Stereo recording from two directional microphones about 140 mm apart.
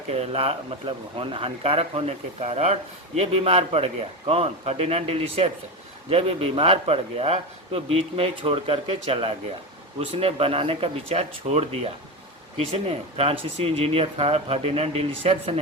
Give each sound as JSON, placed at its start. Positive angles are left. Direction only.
{"t": 0.1, "sound": "a man's voice", "side_deg": -45}